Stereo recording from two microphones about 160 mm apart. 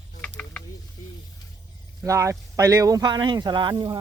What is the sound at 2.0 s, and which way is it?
Speech, 20° right (ahead or behind).